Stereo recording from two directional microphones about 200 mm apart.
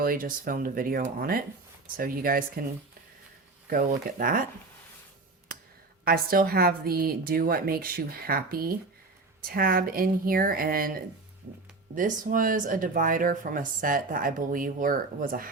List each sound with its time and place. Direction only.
0.0 s speech: 45° right (ahead or behind)
3.7 s speech: 45° right (ahead or behind)
6.1 s speech: 50° right (ahead or behind)